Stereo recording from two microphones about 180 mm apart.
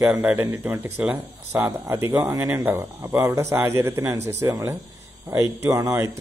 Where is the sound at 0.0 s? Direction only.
10° right (ahead or behind).